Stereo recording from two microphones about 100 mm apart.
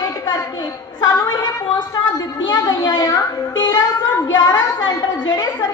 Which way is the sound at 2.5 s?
40° left (ahead or behind).